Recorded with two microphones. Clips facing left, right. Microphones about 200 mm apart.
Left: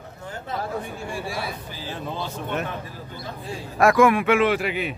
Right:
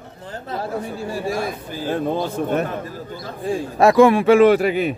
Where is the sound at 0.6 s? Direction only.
40° right (ahead or behind).